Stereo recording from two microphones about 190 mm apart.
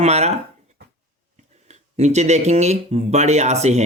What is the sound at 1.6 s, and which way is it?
Speech, 35° right (ahead or behind).